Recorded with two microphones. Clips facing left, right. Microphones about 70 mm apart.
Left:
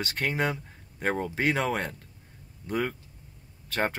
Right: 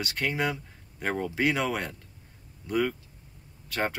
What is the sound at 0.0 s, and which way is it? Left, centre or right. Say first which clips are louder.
Speech: left 1 dB; left.